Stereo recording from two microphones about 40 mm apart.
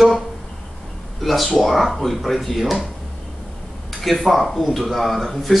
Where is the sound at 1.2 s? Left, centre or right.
Centre.